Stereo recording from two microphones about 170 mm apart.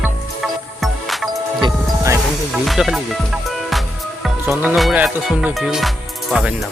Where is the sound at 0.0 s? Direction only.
Centre (ahead or behind).